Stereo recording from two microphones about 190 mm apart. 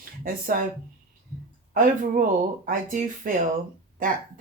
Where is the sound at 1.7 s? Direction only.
45° right (ahead or behind).